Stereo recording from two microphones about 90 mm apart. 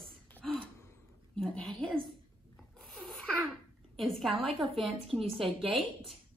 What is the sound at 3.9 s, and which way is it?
Speech, centre (ahead or behind).